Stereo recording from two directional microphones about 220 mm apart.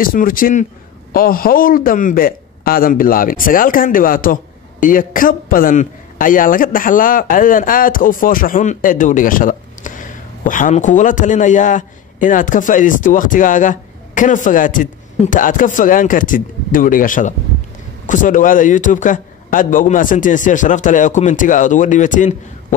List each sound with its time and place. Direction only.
0.0 s a man's voice: 40° left (ahead or behind)